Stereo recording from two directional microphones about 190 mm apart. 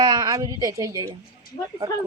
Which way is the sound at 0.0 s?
20° right (ahead or behind).